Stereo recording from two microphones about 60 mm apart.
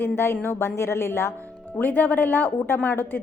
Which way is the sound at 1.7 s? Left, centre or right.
Left.